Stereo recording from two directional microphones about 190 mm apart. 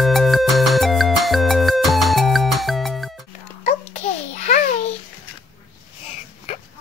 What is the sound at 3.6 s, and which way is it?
Babbling, 35° left (ahead or behind).